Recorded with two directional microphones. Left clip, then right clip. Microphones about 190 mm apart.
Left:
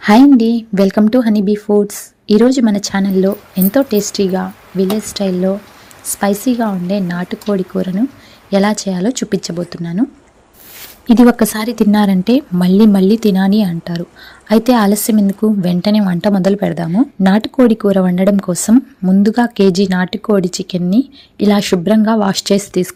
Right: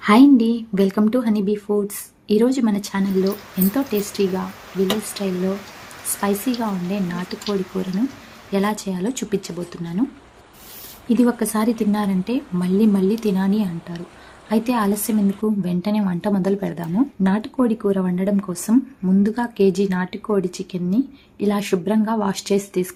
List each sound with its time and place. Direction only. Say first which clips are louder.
0.0 s a woman's voice: left 5 dB; 30° left (ahead or behind)
11.1 s a woman's voice: left 9 dB; 45° left (ahead or behind)